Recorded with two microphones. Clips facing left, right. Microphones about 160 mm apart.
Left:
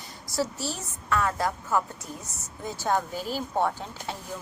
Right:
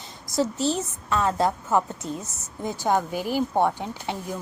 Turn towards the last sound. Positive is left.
turn(degrees=-15)  # may be behind; listen again after turning